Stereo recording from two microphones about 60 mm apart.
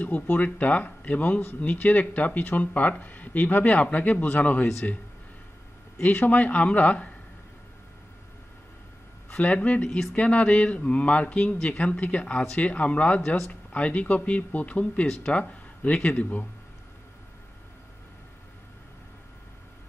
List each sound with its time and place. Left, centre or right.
0.0 s speech: left
6.0 s speech: left
9.4 s speech: left
9.8 s speech: centre
10.1 s speech: left